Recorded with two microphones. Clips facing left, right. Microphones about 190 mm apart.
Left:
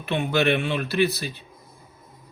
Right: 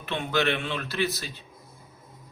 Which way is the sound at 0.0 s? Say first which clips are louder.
Left 4 dB; 15° left (ahead or behind).